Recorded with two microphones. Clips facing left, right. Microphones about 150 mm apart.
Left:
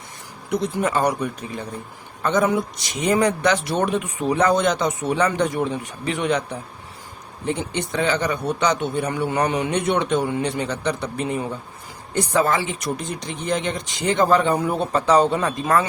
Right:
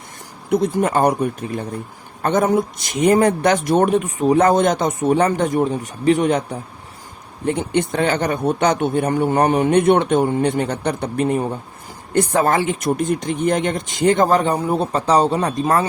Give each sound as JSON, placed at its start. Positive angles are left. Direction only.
{"t": 0.5, "sound": "speech", "side_deg": -55}